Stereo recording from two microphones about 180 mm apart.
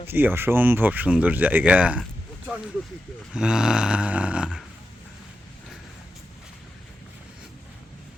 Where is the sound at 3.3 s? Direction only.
5° right (ahead or behind).